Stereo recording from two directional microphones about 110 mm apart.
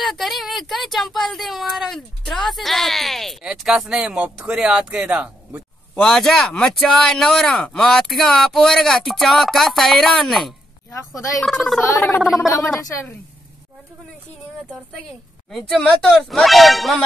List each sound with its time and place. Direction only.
0.0 s speech: centre (ahead or behind)
5.9 s speech: 5° left (ahead or behind)
12.4 s speech: 25° left (ahead or behind)
15.5 s speech: 5° left (ahead or behind)